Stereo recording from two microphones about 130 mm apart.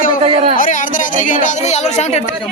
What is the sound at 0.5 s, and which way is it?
Speech, 90° left.